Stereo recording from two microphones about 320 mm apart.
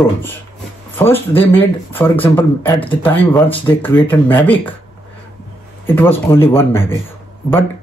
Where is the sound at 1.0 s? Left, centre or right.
Centre.